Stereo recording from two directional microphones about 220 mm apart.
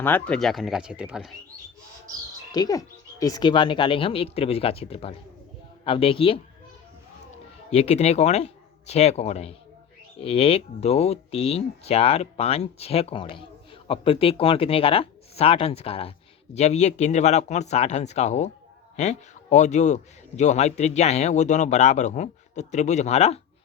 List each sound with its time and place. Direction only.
0.0 s speech: 5° left (ahead or behind)
2.5 s speech: 15° left (ahead or behind)
7.7 s a man's voice: 30° left (ahead or behind)